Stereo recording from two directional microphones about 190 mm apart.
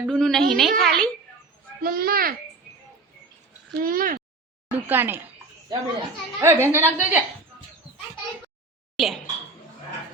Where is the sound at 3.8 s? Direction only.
50° right (ahead or behind).